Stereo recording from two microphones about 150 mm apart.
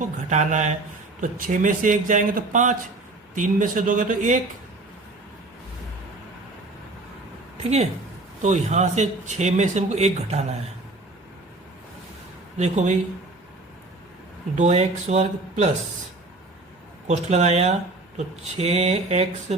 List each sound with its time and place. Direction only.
0.0 s speech: 55° right (ahead or behind)
7.6 s speech: 45° right (ahead or behind)
12.5 s speech: 50° right (ahead or behind)
14.5 s speech: 50° right (ahead or behind)
17.1 s speech: 50° right (ahead or behind)